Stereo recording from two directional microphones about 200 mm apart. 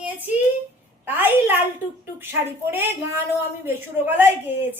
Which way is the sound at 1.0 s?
10° right (ahead or behind).